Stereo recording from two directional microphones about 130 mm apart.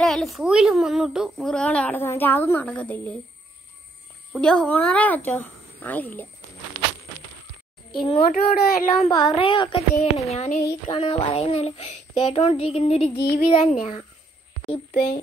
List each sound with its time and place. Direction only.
0.0 s a child's voice: 5° left (ahead or behind)
4.3 s a child's voice: 5° left (ahead or behind)
8.0 s a child's voice: 45° left (ahead or behind)
8.3 s speech: 85° left
9.2 s speech: 35° left (ahead or behind)
9.9 s speech: 55° left (ahead or behind)
10.9 s a child's voice: 40° left (ahead or behind)